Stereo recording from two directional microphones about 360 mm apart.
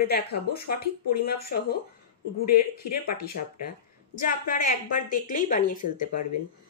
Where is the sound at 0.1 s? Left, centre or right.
Left.